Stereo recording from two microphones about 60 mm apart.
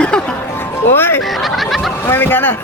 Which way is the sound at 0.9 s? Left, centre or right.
Left.